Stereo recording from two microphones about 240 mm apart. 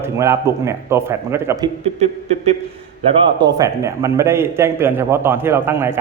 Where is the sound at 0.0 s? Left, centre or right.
Centre.